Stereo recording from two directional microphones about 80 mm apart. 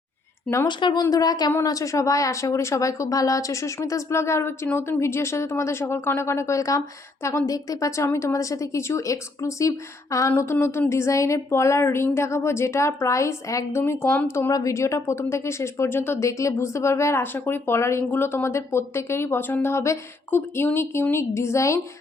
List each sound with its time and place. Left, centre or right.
0.7 s speech: left
1.1 s speech: left
14.5 s speech: left